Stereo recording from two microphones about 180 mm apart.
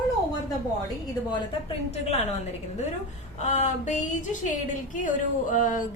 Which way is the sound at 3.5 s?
40° left (ahead or behind).